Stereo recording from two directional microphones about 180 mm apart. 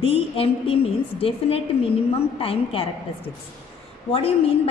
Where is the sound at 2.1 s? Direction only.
30° left (ahead or behind).